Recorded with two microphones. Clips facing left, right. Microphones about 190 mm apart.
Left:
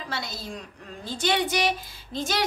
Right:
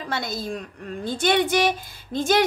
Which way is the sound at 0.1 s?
50° right (ahead or behind).